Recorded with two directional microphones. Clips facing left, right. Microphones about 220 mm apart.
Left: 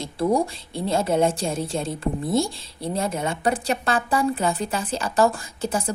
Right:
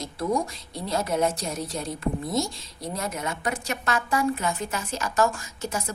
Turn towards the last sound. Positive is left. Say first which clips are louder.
# left 5 dB
turn(degrees=30)  # may be behind; listen again after turning